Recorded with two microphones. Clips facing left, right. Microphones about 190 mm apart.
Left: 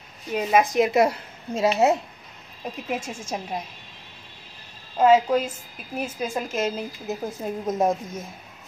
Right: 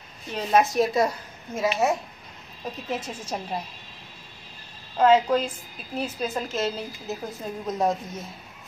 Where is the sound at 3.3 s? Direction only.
10° left (ahead or behind).